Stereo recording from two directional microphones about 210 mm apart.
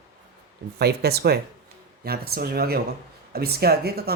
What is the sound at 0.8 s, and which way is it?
Speech, 50° right (ahead or behind).